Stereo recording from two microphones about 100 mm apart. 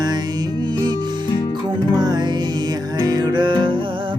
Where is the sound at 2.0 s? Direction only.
45° right (ahead or behind).